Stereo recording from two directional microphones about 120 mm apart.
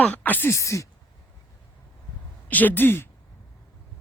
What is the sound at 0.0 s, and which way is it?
Speech, 15° left (ahead or behind).